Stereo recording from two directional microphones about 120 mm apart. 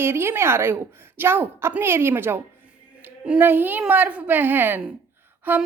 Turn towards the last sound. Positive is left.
turn(degrees=-15)  # may be behind; listen again after turning